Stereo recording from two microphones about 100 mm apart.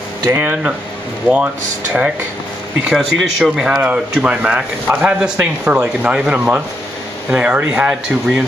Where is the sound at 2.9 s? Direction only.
5° right (ahead or behind).